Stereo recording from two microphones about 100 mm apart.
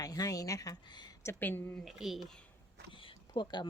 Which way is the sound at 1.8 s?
Centre (ahead or behind).